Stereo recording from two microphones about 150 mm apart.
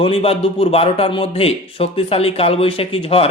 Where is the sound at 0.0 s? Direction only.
40° left (ahead or behind).